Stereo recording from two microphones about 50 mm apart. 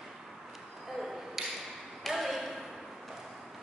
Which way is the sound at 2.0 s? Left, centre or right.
Centre.